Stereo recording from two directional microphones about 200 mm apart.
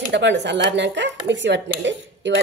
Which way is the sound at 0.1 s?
60° right (ahead or behind).